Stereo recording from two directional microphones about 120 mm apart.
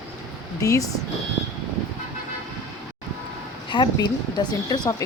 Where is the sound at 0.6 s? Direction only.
30° left (ahead or behind).